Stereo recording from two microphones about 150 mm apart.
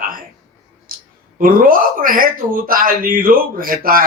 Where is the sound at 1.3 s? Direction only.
70° right (ahead or behind).